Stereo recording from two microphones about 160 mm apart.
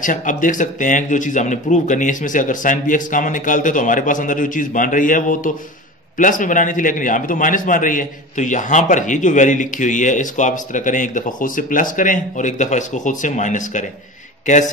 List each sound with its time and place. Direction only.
0.0 s a man's voice: 55° left (ahead or behind)